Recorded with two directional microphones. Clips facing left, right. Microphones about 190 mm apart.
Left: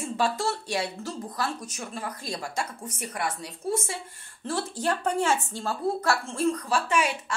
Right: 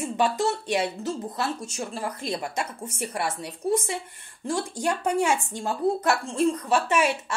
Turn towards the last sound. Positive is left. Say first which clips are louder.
# right 3 dB
turn(degrees=-25)  # may be behind; listen again after turning